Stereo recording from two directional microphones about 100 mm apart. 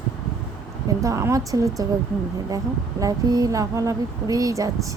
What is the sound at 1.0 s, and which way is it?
Speech, 30° right (ahead or behind).